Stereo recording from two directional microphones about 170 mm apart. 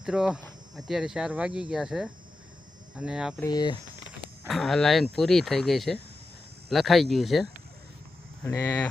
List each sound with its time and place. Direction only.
0.0 s speech: 5° right (ahead or behind)
3.4 s speech: 25° left (ahead or behind)
4.4 s speech: centre (ahead or behind)
8.4 s speech: 15° left (ahead or behind)